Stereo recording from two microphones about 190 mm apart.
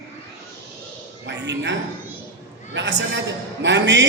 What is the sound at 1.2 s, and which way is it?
A man's voice, 70° right (ahead or behind).